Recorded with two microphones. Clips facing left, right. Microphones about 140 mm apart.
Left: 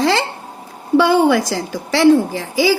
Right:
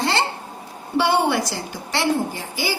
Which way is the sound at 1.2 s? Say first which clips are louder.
Left 7 dB; 90° left.